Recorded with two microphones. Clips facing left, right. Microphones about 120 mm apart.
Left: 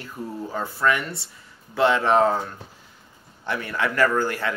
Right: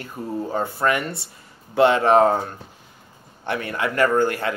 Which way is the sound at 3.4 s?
60° right (ahead or behind).